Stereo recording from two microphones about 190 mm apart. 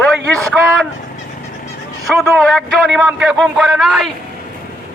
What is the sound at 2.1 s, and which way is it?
A man's voice, centre (ahead or behind).